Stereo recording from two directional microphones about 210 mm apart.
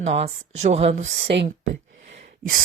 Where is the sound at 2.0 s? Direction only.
35° right (ahead or behind).